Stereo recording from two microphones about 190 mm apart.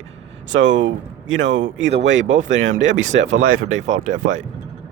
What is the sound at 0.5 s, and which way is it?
Speech, 75° right (ahead or behind).